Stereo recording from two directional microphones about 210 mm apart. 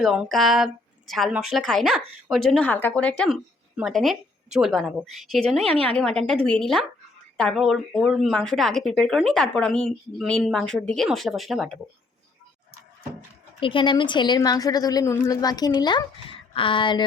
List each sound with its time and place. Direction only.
0.0 s a woman's voice: centre (ahead or behind)
13.6 s a woman's voice: 25° left (ahead or behind)